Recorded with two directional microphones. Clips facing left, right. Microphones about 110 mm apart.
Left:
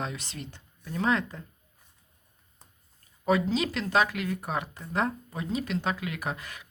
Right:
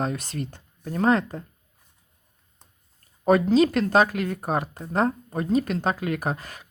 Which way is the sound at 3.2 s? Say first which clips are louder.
Right 8 dB; 45° right (ahead or behind).